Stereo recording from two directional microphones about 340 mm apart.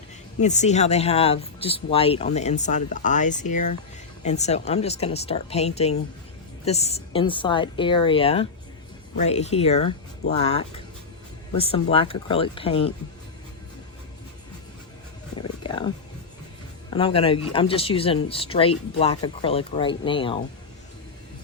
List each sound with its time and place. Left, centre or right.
0.3 s speech: centre
15.4 s roaring cats: centre
16.9 s speech: centre